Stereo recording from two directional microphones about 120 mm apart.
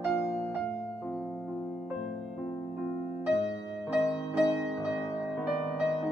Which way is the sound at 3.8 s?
5° right (ahead or behind).